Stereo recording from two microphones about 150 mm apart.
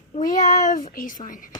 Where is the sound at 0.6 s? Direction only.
60° left (ahead or behind).